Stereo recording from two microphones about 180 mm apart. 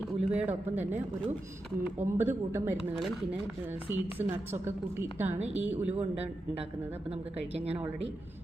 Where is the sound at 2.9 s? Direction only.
Centre (ahead or behind).